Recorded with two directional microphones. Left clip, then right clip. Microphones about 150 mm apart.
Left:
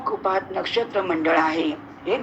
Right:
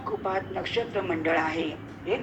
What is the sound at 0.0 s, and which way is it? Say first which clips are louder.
A woman's voice: left 6 dB; 30° left (ahead or behind).